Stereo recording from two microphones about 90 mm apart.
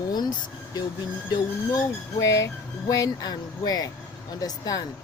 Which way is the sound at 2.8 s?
45° left (ahead or behind).